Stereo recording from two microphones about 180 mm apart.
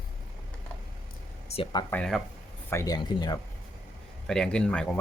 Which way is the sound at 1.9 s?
5° left (ahead or behind).